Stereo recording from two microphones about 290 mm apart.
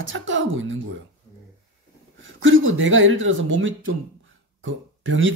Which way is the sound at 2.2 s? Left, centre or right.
Right.